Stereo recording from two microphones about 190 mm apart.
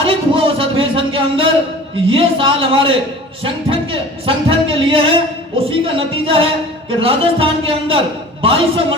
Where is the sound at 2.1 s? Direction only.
30° right (ahead or behind).